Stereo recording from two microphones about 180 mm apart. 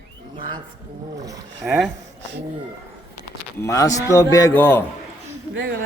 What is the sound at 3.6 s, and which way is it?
A man's voice, 15° left (ahead or behind).